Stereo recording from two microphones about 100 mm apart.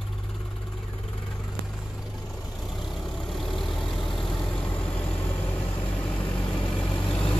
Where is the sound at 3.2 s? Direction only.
Centre (ahead or behind).